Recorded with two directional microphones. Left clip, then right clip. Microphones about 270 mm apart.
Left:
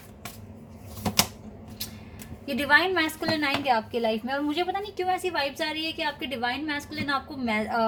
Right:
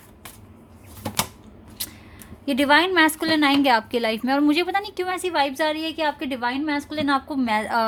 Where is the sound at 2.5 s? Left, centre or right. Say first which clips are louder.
Right 4 dB; right.